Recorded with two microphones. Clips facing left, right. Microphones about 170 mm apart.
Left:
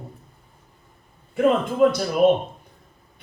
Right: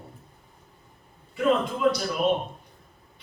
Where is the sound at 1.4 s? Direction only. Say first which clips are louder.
Left 6 dB; 50° left (ahead or behind).